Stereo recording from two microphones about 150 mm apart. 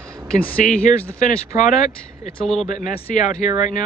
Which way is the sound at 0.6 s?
60° left (ahead or behind).